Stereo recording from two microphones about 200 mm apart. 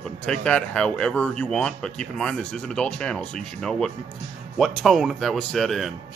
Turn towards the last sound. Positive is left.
turn(degrees=0)  # may be behind; listen again after turning